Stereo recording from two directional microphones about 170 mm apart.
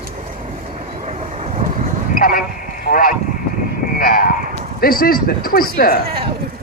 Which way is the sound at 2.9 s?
60° left (ahead or behind).